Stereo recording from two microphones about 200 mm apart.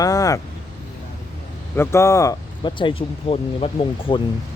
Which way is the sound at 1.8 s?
15° left (ahead or behind).